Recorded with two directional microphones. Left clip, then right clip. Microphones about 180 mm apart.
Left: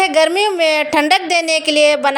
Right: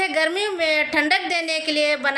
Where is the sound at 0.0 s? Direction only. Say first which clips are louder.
Left 8 dB; 45° left (ahead or behind).